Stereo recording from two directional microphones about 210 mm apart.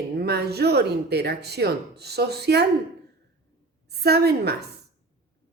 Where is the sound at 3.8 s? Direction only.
50° right (ahead or behind).